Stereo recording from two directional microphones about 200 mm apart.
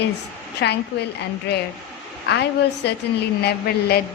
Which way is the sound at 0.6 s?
60° left (ahead or behind).